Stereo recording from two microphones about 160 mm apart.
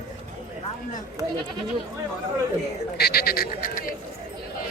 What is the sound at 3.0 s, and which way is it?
Speech, 75° left (ahead or behind).